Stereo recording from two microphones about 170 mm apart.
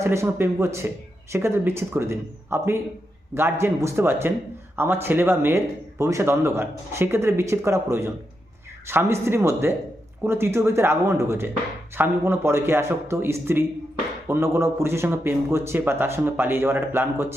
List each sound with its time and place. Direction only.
0.0 s a man's voice: 15° right (ahead or behind)